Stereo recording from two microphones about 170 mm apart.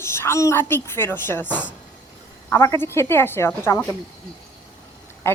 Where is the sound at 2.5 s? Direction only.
15° left (ahead or behind).